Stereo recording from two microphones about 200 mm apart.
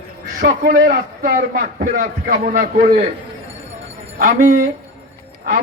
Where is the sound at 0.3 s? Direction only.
45° right (ahead or behind).